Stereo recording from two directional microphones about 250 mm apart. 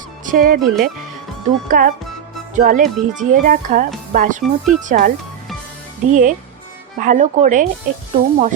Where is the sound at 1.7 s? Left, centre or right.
Right.